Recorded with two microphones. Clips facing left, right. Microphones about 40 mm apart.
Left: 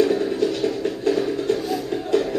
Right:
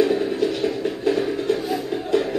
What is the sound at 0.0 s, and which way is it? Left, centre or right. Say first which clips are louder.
Music: even; centre.